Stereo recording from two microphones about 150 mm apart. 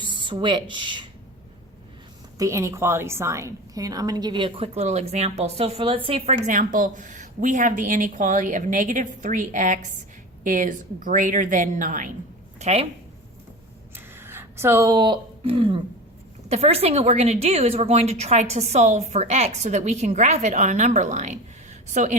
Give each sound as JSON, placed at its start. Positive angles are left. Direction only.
{"t": 0.0, "sound": "speech", "side_deg": -30}
{"t": 2.4, "sound": "a woman's voice", "side_deg": -20}
{"t": 6.3, "sound": "a woman's voice", "side_deg": -60}
{"t": 12.5, "sound": "a woman's voice", "side_deg": -45}
{"t": 13.9, "sound": "a sound", "side_deg": -15}
{"t": 16.5, "sound": "a woman's voice", "side_deg": -45}